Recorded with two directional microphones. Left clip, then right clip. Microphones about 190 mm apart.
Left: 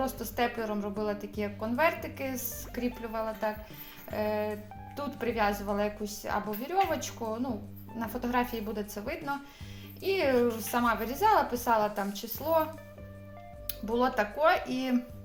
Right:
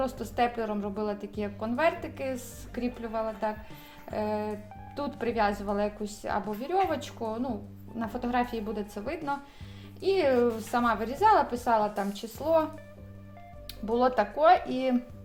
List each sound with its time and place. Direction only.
0.0 s a woman's voice: 30° right (ahead or behind)
4.1 s music: 30° right (ahead or behind)
4.9 s a woman's voice: 30° right (ahead or behind)
12.4 s music: 30° right (ahead or behind)
13.7 s a woman's voice: 30° right (ahead or behind)